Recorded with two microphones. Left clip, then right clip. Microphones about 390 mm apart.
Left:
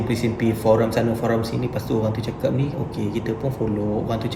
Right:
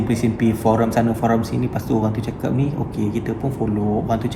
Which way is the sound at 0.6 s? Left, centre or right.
Right.